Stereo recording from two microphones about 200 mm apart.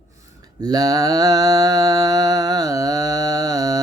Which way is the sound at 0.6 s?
20° right (ahead or behind).